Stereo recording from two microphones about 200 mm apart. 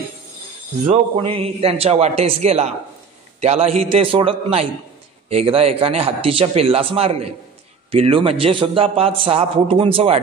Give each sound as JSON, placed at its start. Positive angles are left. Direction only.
{"t": 1.1, "sound": "a man's voice", "side_deg": -30}